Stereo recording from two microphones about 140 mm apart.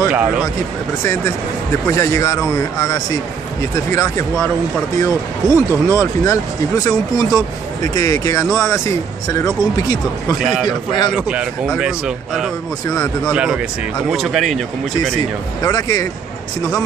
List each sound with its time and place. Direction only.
0.1 s speech: 10° right (ahead or behind)
1.0 s speech: 15° left (ahead or behind)
11.1 s speech: 10° right (ahead or behind)
12.8 s speech: 25° left (ahead or behind)
13.2 s speech: 5° right (ahead or behind)
15.6 s speech: 25° left (ahead or behind)